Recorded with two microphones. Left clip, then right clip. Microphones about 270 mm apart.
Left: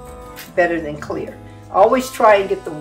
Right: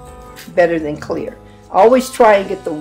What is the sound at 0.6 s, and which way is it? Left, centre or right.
Speech, right.